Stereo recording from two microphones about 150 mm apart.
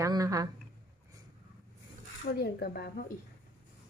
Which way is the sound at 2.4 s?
90° left.